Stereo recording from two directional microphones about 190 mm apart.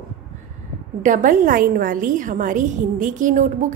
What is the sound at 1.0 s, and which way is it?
A woman's voice, 40° right (ahead or behind).